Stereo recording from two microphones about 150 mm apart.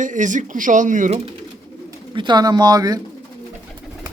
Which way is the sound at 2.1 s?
30° right (ahead or behind).